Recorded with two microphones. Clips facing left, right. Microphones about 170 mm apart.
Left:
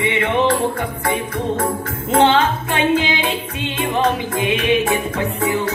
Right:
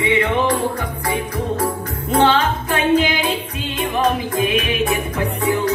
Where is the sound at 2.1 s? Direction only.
25° left (ahead or behind).